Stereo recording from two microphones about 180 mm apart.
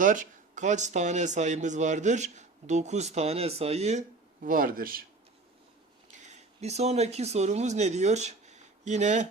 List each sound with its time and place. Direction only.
0.0 s speech: 45° right (ahead or behind)
4.4 s a man's voice: 50° right (ahead or behind)
6.1 s speech: 40° right (ahead or behind)